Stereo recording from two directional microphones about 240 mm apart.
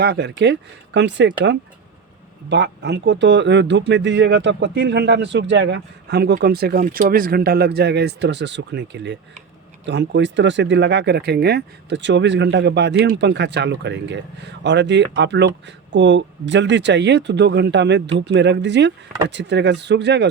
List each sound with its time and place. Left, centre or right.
0.0 s speech: right
2.5 s speech: right